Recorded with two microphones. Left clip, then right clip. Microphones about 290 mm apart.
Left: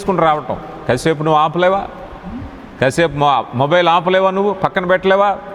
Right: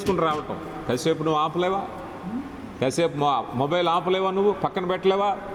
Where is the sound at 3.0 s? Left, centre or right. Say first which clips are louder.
Left 9 dB; left.